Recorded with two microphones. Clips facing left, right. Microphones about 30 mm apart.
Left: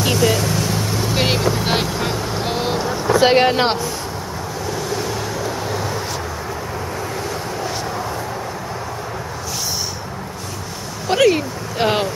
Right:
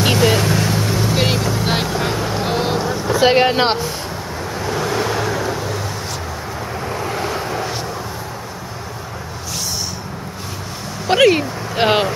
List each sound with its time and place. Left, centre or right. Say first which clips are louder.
0.0 s vehicle: right 2 dB; right
1.1 s vehicle: left 3 dB; centre
3.1 s speech: even; centre
3.5 s speech: right 1 dB; centre
4.6 s vehicle: right 4 dB; right
5.6 s vehicle: even; centre
7.0 s waves: right 3 dB; right
11.1 s speech: right 2 dB; right